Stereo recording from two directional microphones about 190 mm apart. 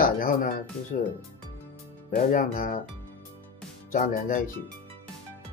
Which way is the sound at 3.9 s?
45° left (ahead or behind).